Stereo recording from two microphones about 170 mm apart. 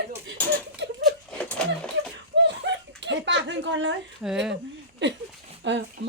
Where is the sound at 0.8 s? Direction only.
90° right.